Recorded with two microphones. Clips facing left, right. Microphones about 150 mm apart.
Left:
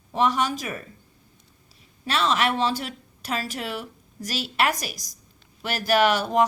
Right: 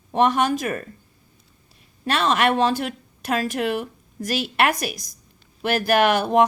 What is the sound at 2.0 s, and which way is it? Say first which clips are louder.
A woman's voice: right 3 dB; 55° right (ahead or behind).